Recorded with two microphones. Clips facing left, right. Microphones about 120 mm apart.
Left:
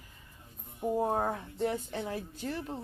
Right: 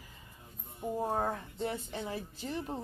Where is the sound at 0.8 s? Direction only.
15° left (ahead or behind).